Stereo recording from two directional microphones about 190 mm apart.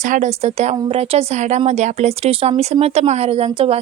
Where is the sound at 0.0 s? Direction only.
40° right (ahead or behind).